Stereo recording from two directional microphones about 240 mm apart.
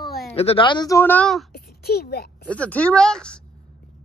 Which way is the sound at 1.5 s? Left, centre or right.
Left.